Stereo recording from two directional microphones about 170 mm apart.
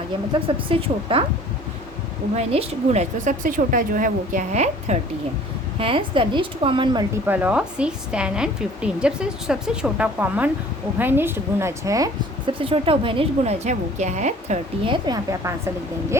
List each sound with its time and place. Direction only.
0.3 s a woman's voice: 30° right (ahead or behind)
2.3 s a woman's voice: 40° right (ahead or behind)
5.8 s a woman's voice: 30° right (ahead or behind)
7.3 s a woman's voice: 10° right (ahead or behind)
12.5 s a woman's voice: 35° right (ahead or behind)
14.8 s a woman's voice: 25° right (ahead or behind)